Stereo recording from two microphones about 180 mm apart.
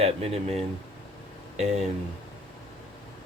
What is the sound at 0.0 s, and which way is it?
Speech, 35° right (ahead or behind).